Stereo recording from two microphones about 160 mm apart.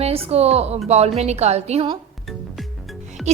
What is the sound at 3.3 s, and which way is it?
Speech, 45° right (ahead or behind).